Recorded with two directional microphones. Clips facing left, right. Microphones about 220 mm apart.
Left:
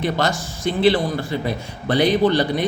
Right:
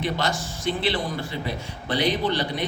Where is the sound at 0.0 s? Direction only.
45° left (ahead or behind).